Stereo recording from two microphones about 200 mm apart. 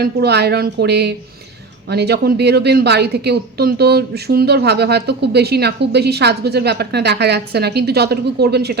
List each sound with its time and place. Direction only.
0.0 s a woman's voice: 55° right (ahead or behind)